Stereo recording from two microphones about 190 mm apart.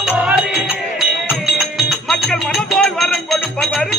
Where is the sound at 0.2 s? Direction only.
5° right (ahead or behind).